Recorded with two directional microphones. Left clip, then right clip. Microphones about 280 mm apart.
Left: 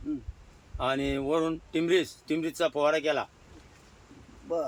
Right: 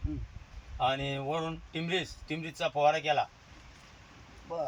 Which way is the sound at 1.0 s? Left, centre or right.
Centre.